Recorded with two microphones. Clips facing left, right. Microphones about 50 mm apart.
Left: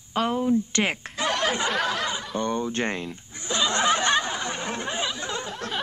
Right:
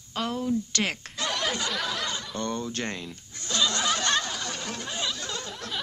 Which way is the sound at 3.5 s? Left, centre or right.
Left.